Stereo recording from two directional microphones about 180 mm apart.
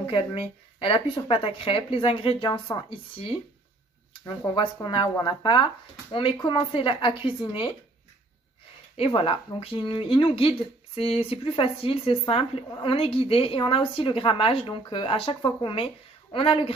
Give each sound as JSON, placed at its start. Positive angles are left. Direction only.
{"t": 0.0, "sound": "a woman's voice", "side_deg": 30}
{"t": 4.4, "sound": "speech", "side_deg": 20}
{"t": 8.9, "sound": "a woman's voice", "side_deg": 30}